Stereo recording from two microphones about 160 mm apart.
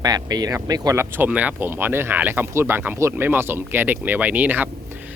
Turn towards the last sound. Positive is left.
turn(degrees=-10)  # may be behind; listen again after turning